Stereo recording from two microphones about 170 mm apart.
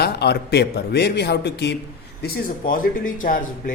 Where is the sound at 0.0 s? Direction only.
70° left (ahead or behind).